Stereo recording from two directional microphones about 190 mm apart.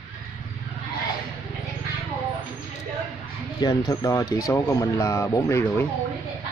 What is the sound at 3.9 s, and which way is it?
Speech, 15° left (ahead or behind).